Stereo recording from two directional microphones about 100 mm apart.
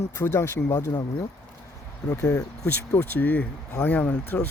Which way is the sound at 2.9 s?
20° left (ahead or behind).